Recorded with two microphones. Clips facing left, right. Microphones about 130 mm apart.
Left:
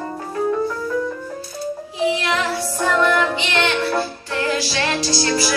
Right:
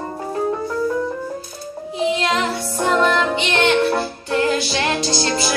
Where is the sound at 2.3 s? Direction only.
25° right (ahead or behind).